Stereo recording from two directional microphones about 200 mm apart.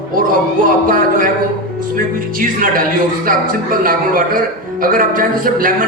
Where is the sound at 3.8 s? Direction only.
45° right (ahead or behind).